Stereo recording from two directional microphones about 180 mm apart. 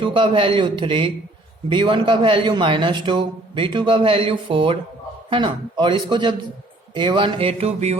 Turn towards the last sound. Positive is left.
turn(degrees=-35)  # may be behind; listen again after turning